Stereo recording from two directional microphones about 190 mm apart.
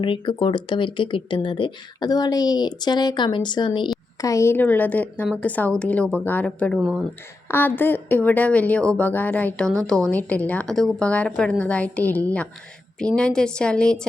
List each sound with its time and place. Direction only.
0.0 s speech: 25° left (ahead or behind); by 6.7 s 5° left (ahead or behind)
6.7 s a woman's voice: 5° right (ahead or behind)
7.4 s a woman's voice: 10° left (ahead or behind)